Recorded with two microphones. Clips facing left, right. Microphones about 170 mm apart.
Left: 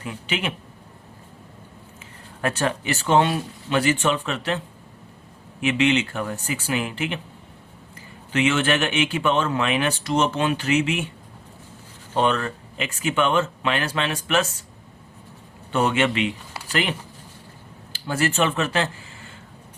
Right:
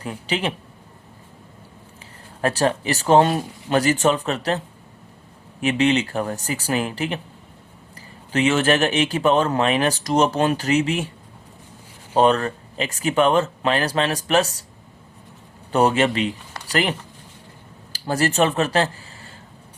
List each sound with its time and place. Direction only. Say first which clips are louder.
0.0 s speech: right 3 dB; 35° right (ahead or behind)
2.4 s speech: right 4 dB; 35° right (ahead or behind)
8.3 s speech: right 3 dB; 35° right (ahead or behind)
12.1 s speech: right 5 dB; 35° right (ahead or behind)
15.7 s speech: right 3 dB; 35° right (ahead or behind)
17.9 s speech: right 3 dB; 40° right (ahead or behind)